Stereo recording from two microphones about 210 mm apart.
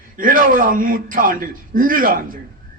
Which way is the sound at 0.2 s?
40° right (ahead or behind).